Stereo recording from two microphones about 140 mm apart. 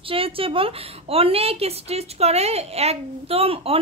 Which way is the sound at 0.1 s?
40° right (ahead or behind).